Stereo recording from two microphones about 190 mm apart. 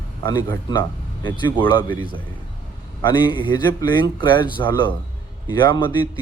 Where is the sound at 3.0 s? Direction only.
25° left (ahead or behind).